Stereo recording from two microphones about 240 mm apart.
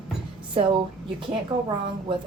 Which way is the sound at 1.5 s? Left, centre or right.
Right.